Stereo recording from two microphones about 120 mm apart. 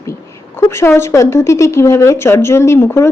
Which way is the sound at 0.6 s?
20° left (ahead or behind).